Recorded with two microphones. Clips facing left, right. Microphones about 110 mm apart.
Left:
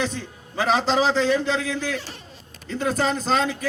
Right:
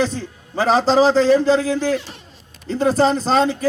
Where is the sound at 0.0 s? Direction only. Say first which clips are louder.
Right 6 dB; 35° right (ahead or behind).